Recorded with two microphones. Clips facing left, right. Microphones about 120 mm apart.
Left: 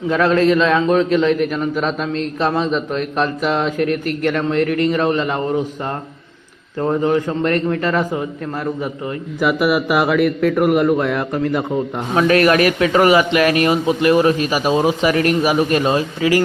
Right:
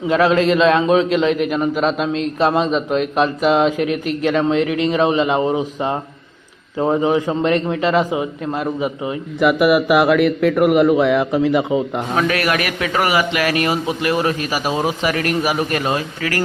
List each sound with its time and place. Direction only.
0.1 s a man's voice: 5° right (ahead or behind)
9.4 s a man's voice: centre (ahead or behind)
12.1 s a man's voice: 30° left (ahead or behind)